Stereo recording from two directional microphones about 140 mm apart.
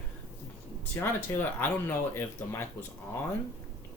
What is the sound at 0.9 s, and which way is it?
Speech, 10° left (ahead or behind).